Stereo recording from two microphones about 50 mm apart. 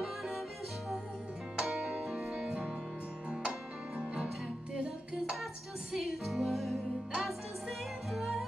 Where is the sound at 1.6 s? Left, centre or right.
Centre.